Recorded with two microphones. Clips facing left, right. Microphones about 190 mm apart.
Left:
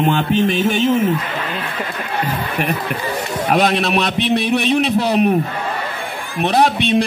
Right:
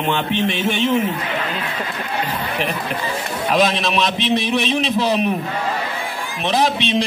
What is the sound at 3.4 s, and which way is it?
A man's voice, 60° left (ahead or behind).